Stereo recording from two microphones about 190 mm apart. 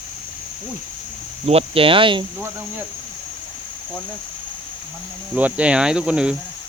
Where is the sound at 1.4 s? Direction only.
30° right (ahead or behind).